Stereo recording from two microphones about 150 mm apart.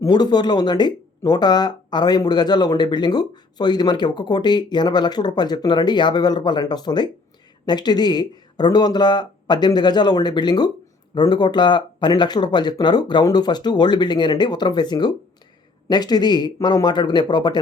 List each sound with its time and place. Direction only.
0.0 s speech: 25° left (ahead or behind)